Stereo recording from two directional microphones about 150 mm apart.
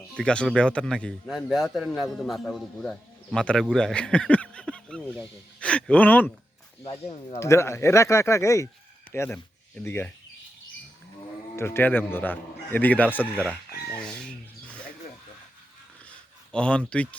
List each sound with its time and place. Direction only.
0.2 s a man's voice: 5° left (ahead or behind)
6.8 s speech: 35° left (ahead or behind)
7.3 s speech: 20° left (ahead or behind)
11.5 s a man's voice: 15° left (ahead or behind)
13.3 s speech: 10° right (ahead or behind)
13.9 s rub: 5° left (ahead or behind)
16.0 s a sound: 5° left (ahead or behind)
16.9 s a man's voice: 10° left (ahead or behind)